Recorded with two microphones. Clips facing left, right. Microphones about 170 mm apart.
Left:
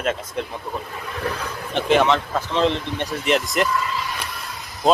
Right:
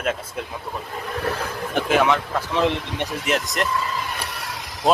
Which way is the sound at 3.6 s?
5° left (ahead or behind).